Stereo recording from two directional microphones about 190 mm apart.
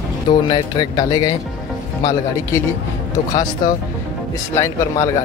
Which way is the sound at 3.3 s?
20° left (ahead or behind).